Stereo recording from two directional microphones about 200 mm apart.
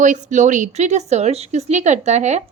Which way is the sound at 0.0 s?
40° right (ahead or behind).